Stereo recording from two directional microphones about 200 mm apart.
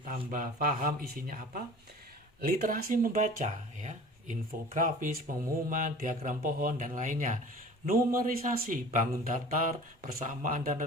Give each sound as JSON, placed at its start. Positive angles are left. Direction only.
{"t": 0.0, "sound": "a man's voice", "side_deg": -45}